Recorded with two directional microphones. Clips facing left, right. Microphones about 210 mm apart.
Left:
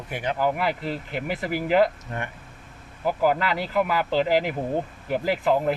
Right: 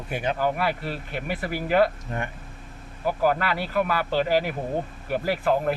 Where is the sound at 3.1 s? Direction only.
15° left (ahead or behind).